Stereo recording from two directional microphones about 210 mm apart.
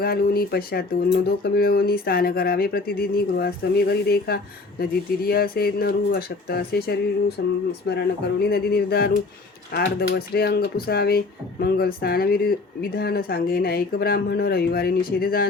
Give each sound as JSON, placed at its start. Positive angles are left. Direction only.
{"t": 0.0, "sound": "speech", "side_deg": 45}